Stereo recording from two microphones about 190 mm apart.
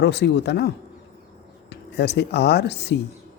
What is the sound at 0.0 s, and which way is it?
Speech, 60° left (ahead or behind).